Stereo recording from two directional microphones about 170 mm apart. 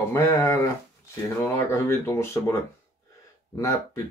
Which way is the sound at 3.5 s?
20° left (ahead or behind).